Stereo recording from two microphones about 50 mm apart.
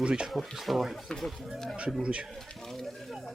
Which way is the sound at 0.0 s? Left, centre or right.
Centre.